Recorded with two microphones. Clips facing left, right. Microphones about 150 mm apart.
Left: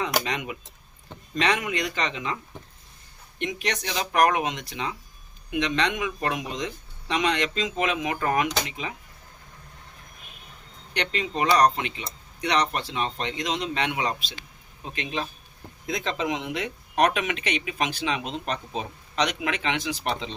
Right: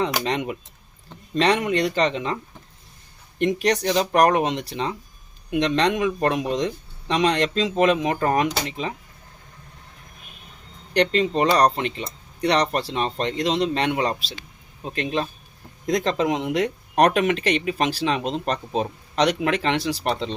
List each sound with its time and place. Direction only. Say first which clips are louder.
0.0 s speech: right 4 dB; 30° right (ahead or behind)
3.3 s speech: right 9 dB; 40° right (ahead or behind)
10.9 s speech: right 9 dB; 40° right (ahead or behind)